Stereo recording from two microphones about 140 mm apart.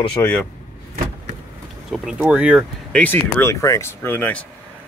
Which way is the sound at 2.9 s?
10° left (ahead or behind).